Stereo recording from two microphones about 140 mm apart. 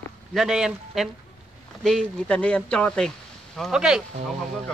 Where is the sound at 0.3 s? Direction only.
Centre (ahead or behind).